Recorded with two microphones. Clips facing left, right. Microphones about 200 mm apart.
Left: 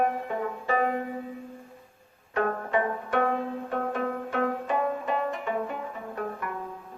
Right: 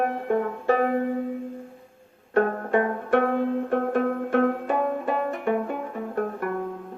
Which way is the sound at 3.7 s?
50° right (ahead or behind).